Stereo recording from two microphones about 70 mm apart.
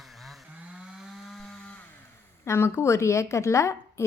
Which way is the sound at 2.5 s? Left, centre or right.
Left.